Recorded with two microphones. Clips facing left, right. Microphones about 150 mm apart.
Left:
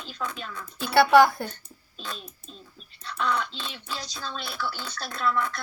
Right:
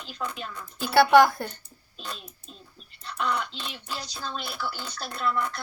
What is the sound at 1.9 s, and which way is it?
A child's voice, 10° right (ahead or behind).